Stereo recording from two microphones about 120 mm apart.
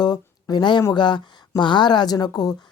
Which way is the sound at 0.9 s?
40° left (ahead or behind).